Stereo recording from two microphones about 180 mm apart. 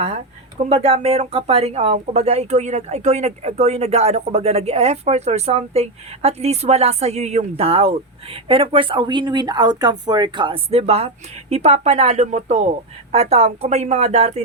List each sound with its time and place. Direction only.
0.6 s speech: 35° right (ahead or behind)